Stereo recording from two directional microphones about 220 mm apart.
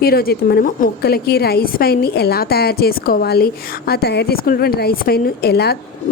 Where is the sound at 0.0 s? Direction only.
45° left (ahead or behind).